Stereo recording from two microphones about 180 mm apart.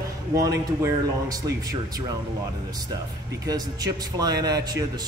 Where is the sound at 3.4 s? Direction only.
20° right (ahead or behind).